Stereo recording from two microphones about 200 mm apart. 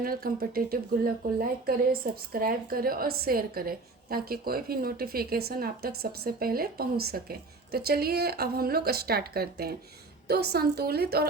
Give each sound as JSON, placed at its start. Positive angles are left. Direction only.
{"t": 0.0, "sound": "speech", "side_deg": -50}